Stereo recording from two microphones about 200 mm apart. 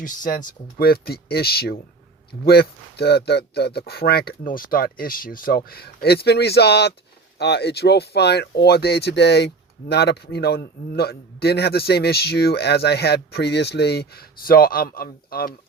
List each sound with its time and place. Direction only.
0.0 s a man's voice: 40° left (ahead or behind)